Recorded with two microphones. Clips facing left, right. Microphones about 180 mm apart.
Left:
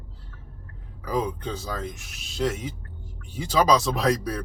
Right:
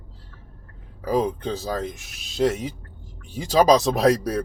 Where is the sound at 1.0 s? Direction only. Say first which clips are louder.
Right 5 dB; 30° right (ahead or behind).